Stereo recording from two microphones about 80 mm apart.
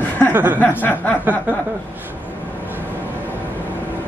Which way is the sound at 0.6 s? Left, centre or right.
Left.